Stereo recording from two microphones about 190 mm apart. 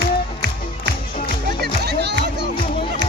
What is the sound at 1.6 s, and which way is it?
Music, 60° right (ahead or behind).